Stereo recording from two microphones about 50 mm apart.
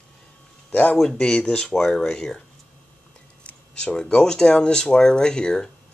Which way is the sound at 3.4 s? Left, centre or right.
Left.